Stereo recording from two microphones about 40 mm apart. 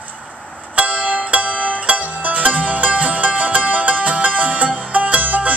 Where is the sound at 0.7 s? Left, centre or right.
Right.